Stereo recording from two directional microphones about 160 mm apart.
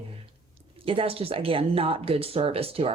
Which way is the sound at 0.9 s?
35° right (ahead or behind).